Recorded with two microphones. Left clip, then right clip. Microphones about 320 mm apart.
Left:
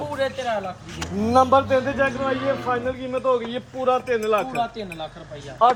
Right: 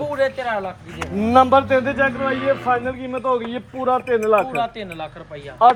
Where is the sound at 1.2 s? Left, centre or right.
Right.